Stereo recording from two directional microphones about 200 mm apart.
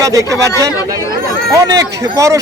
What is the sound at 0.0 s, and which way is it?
Speech, 15° right (ahead or behind).